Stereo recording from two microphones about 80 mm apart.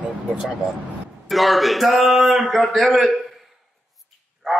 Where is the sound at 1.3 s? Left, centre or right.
Centre.